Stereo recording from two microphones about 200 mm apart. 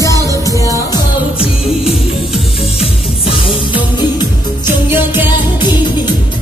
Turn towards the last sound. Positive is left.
turn(degrees=-10)  # may be behind; listen again after turning